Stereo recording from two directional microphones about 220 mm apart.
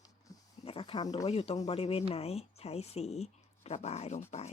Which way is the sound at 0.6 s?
25° left (ahead or behind).